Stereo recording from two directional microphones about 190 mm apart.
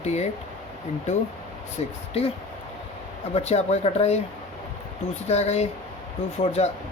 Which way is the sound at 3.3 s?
35° left (ahead or behind).